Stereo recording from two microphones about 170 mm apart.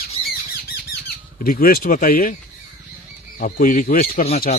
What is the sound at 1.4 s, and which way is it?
Speech, 60° left (ahead or behind).